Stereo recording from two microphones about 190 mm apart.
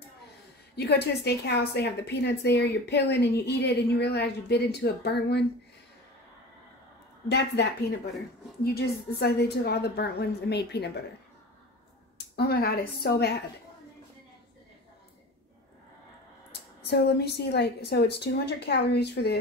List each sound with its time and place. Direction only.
0.7 s a woman's voice: 60° left (ahead or behind)
7.2 s a woman's voice: 60° left (ahead or behind)
8.6 s a woman's voice: 55° left (ahead or behind)
12.4 s a woman's voice: 55° left (ahead or behind)
16.8 s a woman's voice: 60° left (ahead or behind)